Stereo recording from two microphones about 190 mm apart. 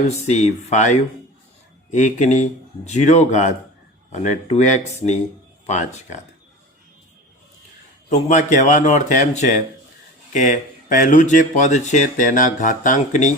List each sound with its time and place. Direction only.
0.1 s speech: 35° left (ahead or behind)
8.3 s speech: 40° left (ahead or behind)